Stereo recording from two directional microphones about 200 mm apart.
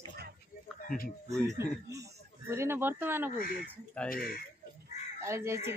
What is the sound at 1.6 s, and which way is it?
Speech, 15° right (ahead or behind).